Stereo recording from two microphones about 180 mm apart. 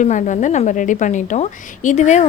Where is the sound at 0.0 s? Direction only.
45° left (ahead or behind).